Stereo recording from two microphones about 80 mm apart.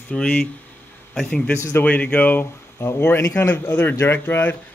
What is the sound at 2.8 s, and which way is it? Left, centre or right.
A man's voice, left.